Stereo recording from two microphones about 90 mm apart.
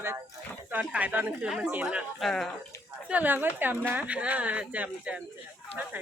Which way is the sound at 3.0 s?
20° right (ahead or behind).